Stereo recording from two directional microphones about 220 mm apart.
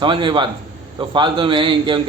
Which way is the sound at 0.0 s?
20° right (ahead or behind).